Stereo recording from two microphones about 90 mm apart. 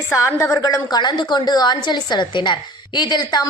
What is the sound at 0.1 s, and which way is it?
Speech, 30° left (ahead or behind).